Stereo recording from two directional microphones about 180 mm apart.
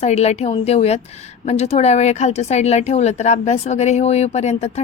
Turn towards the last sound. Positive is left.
turn(degrees=40)  # may be behind; listen again after turning